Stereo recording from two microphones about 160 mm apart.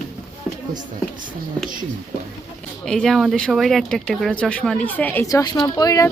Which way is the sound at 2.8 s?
5° left (ahead or behind).